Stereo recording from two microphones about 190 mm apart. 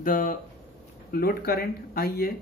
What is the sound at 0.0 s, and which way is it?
Speech, 45° left (ahead or behind).